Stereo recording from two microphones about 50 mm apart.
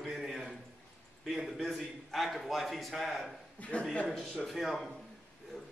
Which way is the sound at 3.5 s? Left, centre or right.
Left.